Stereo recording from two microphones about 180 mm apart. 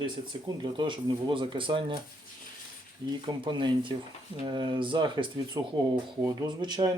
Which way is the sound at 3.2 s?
25° right (ahead or behind).